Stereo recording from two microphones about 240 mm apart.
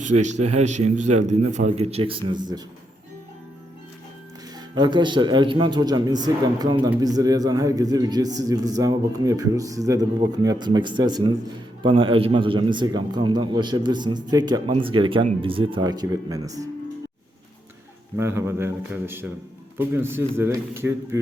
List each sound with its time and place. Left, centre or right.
0.0 s a man's voice: right
4.7 s a man's voice: centre
18.2 s a man's voice: centre